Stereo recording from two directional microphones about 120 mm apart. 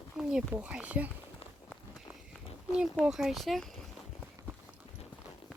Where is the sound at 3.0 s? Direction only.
5° right (ahead or behind).